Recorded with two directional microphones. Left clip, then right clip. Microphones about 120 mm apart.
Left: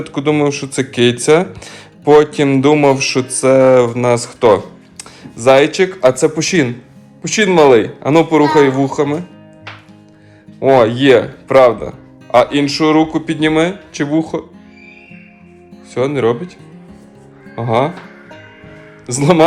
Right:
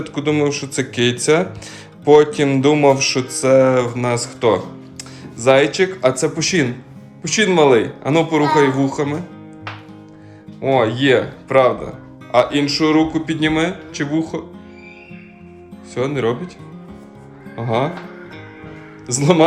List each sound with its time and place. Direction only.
0.0 s speech: 10° right (ahead or behind)
10.6 s speech: centre (ahead or behind)
11.8 s music: 15° right (ahead or behind)
12.4 s speech: 10° right (ahead or behind)
16.0 s speech: 10° right (ahead or behind)
17.5 s speech: 5° right (ahead or behind)
19.0 s speech: 10° right (ahead or behind)